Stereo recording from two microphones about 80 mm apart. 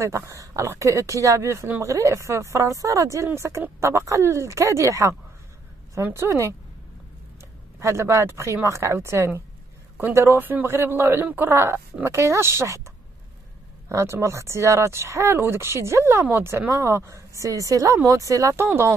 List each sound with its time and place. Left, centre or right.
0.0 s speech: right
6.1 s speech: right
7.8 s speech: right
13.8 s speech: right
18.6 s speech: right